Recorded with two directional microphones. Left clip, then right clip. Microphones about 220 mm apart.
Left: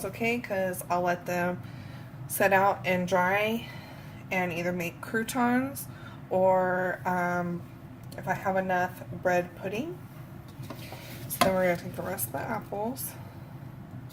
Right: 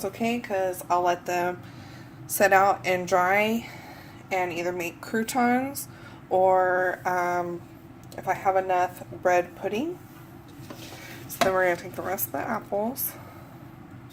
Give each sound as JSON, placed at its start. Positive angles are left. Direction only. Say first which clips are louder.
{"t": 0.0, "sound": "a woman's voice", "louder": "right 1 dB", "side_deg": -30}
{"t": 4.5, "sound": "a woman's voice", "louder": "right 2 dB", "side_deg": -30}
{"t": 11.5, "sound": "speech", "louder": "right 3 dB", "side_deg": -30}